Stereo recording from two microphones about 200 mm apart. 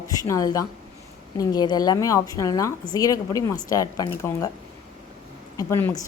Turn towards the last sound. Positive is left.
turn(degrees=15)  # may be behind; listen again after turning